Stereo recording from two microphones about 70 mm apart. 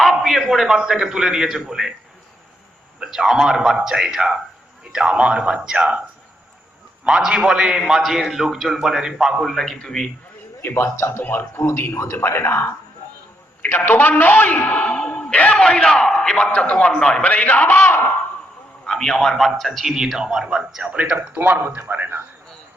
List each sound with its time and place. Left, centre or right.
0.0 s a sound: centre
0.8 s speech: centre
3.0 s speech: centre
7.0 s a man's voice: centre
10.6 s a man's voice: left
18.9 s a man's voice: centre
20.8 s speech: centre